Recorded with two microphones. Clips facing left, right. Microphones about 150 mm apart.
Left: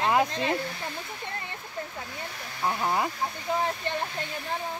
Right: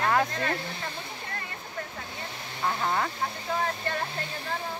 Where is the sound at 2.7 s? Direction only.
15° left (ahead or behind).